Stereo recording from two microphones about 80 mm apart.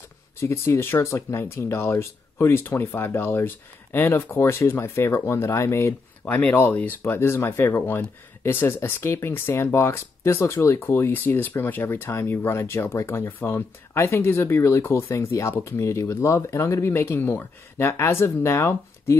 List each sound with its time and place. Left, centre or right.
0.4 s speech: left
6.2 s speech: centre